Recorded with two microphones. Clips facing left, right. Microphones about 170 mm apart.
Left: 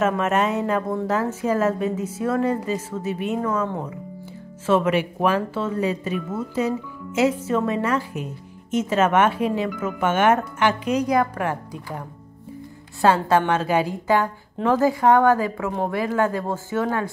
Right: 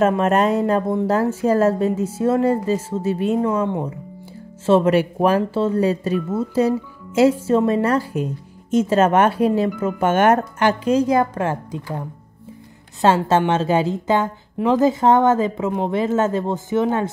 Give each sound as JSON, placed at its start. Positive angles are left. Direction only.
{"t": 0.2, "sound": "a woman's voice", "side_deg": -35}
{"t": 3.6, "sound": "a woman's voice", "side_deg": -20}
{"t": 4.6, "sound": "a woman's voice", "side_deg": -35}